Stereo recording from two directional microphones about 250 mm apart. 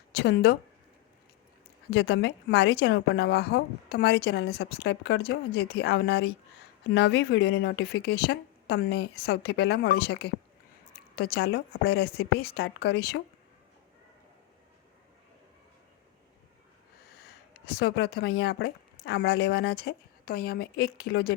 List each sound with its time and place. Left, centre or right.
0.2 s speech: left
1.9 s speech: left
17.7 s speech: left